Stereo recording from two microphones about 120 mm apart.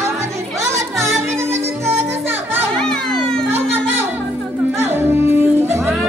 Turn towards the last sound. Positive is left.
turn(degrees=-20)  # may be behind; listen again after turning